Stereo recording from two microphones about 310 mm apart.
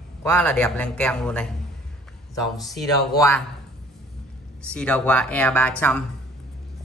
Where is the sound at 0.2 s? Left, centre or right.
Centre.